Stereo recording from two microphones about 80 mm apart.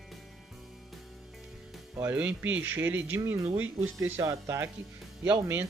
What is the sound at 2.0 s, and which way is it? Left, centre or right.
Speech, centre.